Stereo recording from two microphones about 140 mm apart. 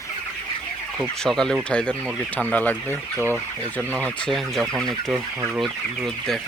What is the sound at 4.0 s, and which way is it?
Speech, 5° left (ahead or behind).